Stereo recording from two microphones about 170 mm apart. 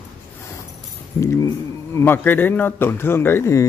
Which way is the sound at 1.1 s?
15° left (ahead or behind).